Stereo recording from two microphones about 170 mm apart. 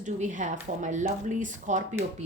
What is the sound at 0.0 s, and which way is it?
Speech, 45° right (ahead or behind).